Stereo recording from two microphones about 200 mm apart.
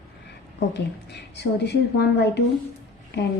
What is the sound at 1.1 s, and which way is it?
Speech, 55° left (ahead or behind).